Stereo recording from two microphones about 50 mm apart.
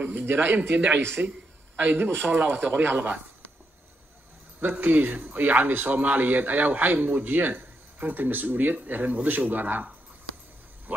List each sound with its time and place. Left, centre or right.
0.0 s speech: right
4.6 s speech: right
10.9 s speech: right